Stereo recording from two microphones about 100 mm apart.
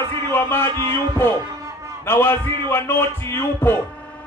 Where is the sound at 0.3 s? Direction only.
20° left (ahead or behind).